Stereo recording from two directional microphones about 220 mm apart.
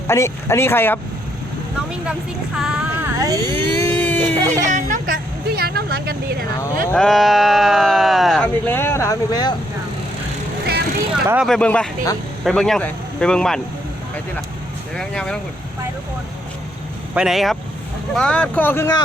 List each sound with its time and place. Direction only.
0.1 s speech: 10° left (ahead or behind)
2.6 s music: 5° right (ahead or behind)
3.8 s a sound: 10° left (ahead or behind)
4.4 s speech: 15° right (ahead or behind)
4.6 s vehicle: 35° right (ahead or behind)
6.9 s speech: centre (ahead or behind); by 9.6 s 15° left (ahead or behind)
11.1 s speech: 5° right (ahead or behind)
14.9 s speech: 5° left (ahead or behind)
17.2 s speech: centre (ahead or behind); by 19.0 s 15° left (ahead or behind)